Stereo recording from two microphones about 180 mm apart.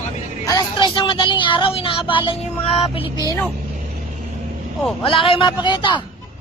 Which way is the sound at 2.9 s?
30° left (ahead or behind).